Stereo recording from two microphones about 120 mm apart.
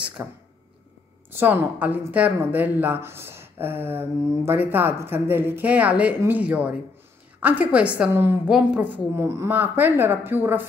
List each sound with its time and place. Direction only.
0.2 s a woman's voice: 20° right (ahead or behind)
8.5 s a woman's voice: 5° right (ahead or behind)
9.2 s a woman's voice: 25° right (ahead or behind)
9.5 s a woman's voice: 15° right (ahead or behind)